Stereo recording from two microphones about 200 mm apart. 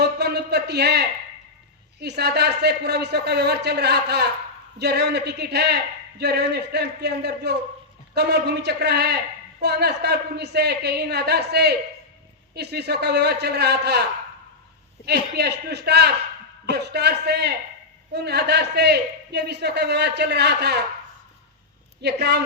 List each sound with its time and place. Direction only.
0.0 s a sound: 55° right (ahead or behind)
2.0 s a woman's voice: 55° right (ahead or behind)
22.0 s a woman's voice: 55° right (ahead or behind)